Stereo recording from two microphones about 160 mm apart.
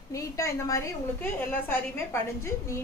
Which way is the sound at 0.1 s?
20° left (ahead or behind).